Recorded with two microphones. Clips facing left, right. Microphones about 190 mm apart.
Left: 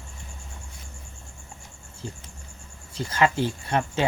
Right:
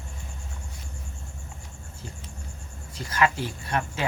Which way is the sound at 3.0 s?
25° left (ahead or behind).